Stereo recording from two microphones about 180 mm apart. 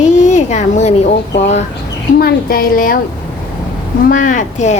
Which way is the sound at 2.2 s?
55° left (ahead or behind).